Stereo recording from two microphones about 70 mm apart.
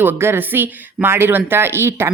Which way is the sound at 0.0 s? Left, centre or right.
Right.